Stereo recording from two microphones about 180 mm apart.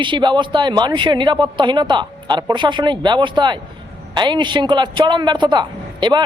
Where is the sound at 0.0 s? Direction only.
25° right (ahead or behind).